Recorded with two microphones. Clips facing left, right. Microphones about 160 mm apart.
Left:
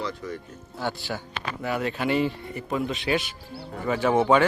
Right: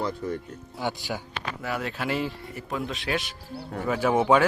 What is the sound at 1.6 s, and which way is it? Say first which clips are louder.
A man's voice: left 4 dB; centre (ahead or behind).